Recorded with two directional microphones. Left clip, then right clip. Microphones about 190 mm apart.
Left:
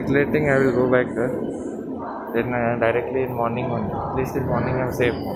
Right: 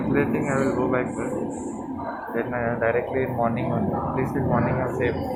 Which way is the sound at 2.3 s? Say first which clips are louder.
Left 4 dB; 20° left (ahead or behind).